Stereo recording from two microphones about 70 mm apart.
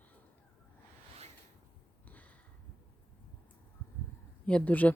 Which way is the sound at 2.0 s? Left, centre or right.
Left.